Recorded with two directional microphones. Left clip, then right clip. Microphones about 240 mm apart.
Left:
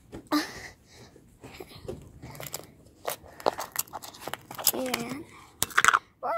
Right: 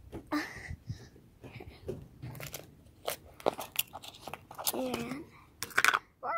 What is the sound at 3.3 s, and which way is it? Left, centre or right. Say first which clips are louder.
Biting: left 5 dB; left.